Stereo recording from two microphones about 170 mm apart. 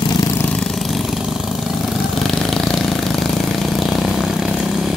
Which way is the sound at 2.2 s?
Centre (ahead or behind).